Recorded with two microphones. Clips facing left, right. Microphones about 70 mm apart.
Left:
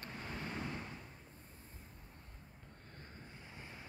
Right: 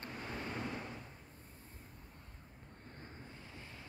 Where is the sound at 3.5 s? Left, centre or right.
Left.